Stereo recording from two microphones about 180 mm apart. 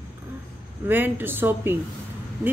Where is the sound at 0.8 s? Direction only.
10° right (ahead or behind).